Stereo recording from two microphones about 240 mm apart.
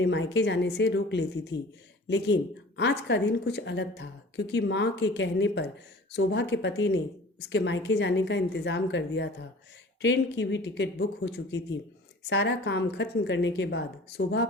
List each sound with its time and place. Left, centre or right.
0.0 s speech: left